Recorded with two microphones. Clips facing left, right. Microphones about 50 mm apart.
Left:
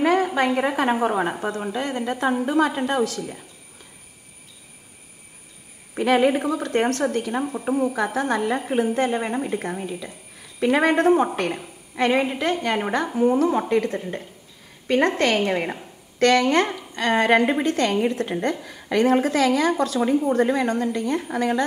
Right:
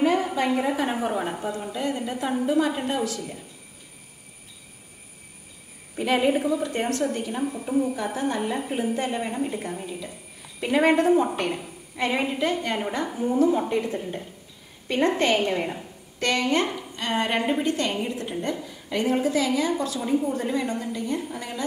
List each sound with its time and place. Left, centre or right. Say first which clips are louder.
0.0 s a sound: left 3 dB; left
0.6 s a woman's voice: left 3 dB; left
0.8 s speech: left 5 dB; left
1.4 s a woman's voice: left 2 dB; left
3.2 s speech: left 3 dB; left
6.0 s a woman's voice: left 3 dB; left
7.5 s speech: left 2 dB; left
7.9 s a woman's voice: left 4 dB; left
13.6 s a woman's voice: left 4 dB; left
15.4 s speech: left 2 dB; left
16.2 s a woman's voice: left 6 dB; left